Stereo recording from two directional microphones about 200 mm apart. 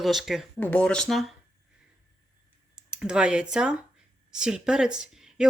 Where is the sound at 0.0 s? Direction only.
Centre (ahead or behind).